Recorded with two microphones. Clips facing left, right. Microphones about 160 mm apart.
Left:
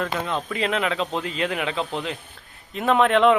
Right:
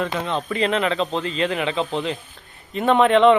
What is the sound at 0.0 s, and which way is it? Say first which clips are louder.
A man's voice: right 2 dB; 5° left (ahead or behind).